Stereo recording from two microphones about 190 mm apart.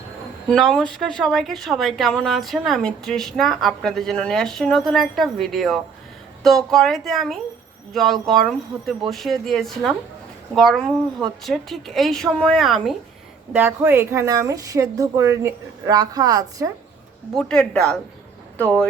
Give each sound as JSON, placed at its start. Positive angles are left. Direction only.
{"t": 0.4, "sound": "a woman's voice", "side_deg": 5}
{"t": 17.3, "sound": "a woman's voice", "side_deg": 5}